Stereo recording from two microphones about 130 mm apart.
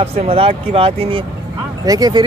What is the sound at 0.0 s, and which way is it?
Speech, 50° right (ahead or behind).